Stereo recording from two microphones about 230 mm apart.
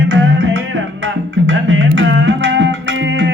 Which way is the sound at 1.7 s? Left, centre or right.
Right.